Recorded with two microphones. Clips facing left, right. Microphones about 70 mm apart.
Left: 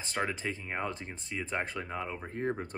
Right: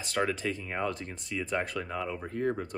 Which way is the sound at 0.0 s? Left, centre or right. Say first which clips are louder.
Right 4 dB; left.